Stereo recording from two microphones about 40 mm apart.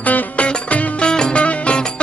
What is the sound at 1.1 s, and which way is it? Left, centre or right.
Music, left.